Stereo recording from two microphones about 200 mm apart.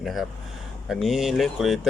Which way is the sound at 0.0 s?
Centre (ahead or behind).